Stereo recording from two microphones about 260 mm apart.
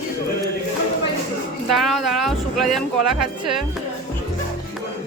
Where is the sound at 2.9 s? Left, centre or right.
Right.